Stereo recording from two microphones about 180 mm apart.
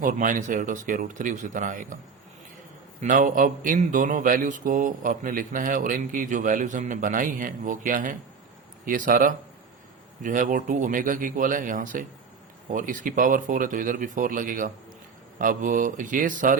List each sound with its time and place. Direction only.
0.0 s speech: 50° right (ahead or behind)
3.0 s speech: 45° right (ahead or behind)